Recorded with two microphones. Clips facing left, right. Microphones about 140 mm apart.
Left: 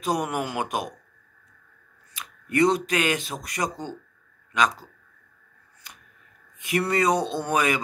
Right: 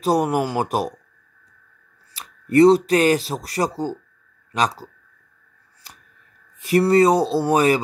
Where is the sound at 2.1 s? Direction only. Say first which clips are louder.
Right 8 dB; 35° right (ahead or behind).